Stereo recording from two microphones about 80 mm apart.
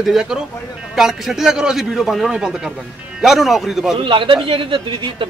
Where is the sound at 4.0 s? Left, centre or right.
Right.